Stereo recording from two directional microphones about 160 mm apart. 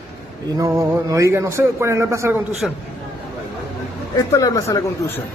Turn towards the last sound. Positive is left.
turn(degrees=20)  # may be behind; listen again after turning